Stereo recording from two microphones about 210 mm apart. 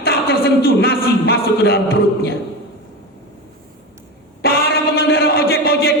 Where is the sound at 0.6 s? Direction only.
45° left (ahead or behind).